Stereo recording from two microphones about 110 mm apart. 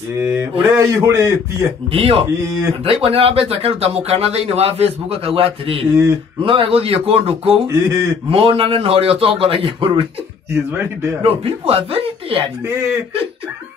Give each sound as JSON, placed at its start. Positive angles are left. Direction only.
{"t": 0.2, "sound": "a man's voice", "side_deg": -25}
{"t": 1.9, "sound": "speech", "side_deg": -60}
{"t": 7.6, "sound": "a man's voice", "side_deg": -25}
{"t": 8.3, "sound": "speech", "side_deg": -60}
{"t": 10.5, "sound": "a man's voice", "side_deg": -20}
{"t": 11.2, "sound": "speech", "side_deg": -60}